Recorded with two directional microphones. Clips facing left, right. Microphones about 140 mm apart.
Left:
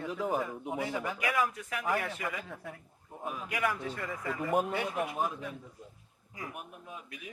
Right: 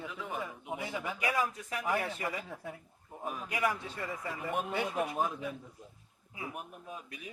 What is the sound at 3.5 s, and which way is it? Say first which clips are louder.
Speech: even; 25° right (ahead or behind).